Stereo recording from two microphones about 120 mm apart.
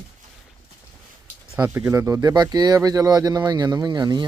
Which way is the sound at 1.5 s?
20° right (ahead or behind).